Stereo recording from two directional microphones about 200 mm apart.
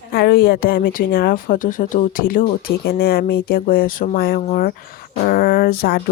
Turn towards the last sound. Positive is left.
turn(degrees=50)  # may be behind; listen again after turning